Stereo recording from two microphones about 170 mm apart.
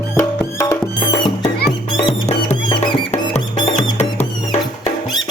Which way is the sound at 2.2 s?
35° left (ahead or behind).